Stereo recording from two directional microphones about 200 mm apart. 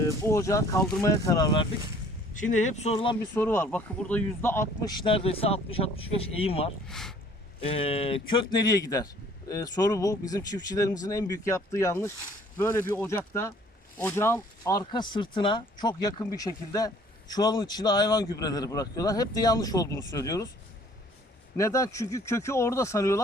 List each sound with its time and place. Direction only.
0.0 s speech: 15° left (ahead or behind)
2.3 s speech: 40° left (ahead or behind)
3.3 s speech: 10° left (ahead or behind); by 6.7 s 30° left (ahead or behind)
6.8 s speech: centre (ahead or behind)
7.6 s speech: 30° left (ahead or behind)
21.5 s speech: 15° left (ahead or behind)